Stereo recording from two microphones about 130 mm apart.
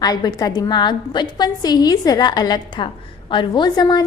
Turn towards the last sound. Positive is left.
turn(degrees=35)  # may be behind; listen again after turning